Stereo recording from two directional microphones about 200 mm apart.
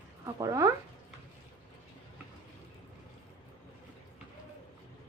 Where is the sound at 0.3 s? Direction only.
15° right (ahead or behind).